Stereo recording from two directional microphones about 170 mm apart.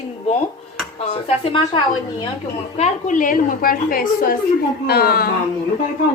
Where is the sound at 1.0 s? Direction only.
35° left (ahead or behind).